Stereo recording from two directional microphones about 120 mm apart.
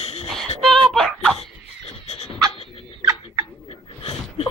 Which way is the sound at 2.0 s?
65° left (ahead or behind).